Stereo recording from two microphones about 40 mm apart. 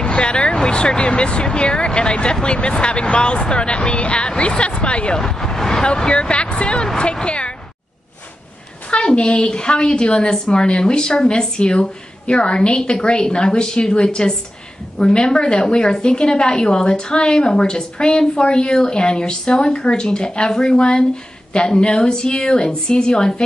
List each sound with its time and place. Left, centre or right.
0.0 s a woman's voice: left
5.2 s speech: centre
5.9 s a woman's voice: left
8.9 s a woman's voice: left